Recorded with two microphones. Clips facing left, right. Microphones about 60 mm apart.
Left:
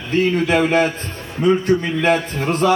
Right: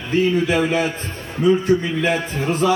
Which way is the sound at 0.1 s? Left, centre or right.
Left.